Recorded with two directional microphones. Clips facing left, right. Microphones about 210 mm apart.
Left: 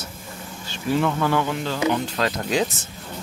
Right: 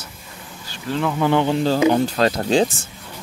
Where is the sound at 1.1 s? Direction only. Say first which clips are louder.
Right 5 dB; 20° right (ahead or behind).